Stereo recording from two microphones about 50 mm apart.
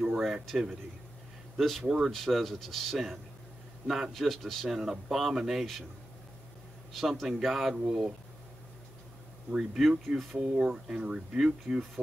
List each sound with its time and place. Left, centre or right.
0.0 s a sound: centre
1.6 s speech: centre
3.8 s speech: centre
6.9 s speech: centre
9.6 s speech: centre
10.4 s speech: centre